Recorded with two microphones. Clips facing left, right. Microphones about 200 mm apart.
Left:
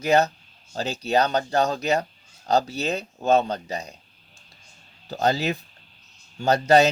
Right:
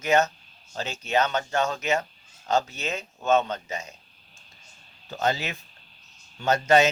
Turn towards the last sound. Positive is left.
turn(degrees=35)  # may be behind; listen again after turning